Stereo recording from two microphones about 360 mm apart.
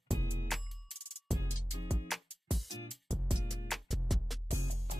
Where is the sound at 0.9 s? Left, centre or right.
Right.